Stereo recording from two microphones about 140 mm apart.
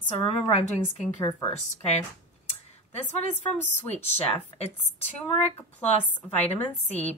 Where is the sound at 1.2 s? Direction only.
40° left (ahead or behind).